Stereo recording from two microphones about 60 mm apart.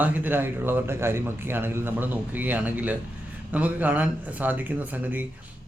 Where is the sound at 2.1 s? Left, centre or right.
Right.